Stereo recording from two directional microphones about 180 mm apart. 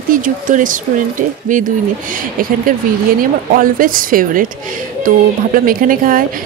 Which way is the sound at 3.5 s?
50° right (ahead or behind).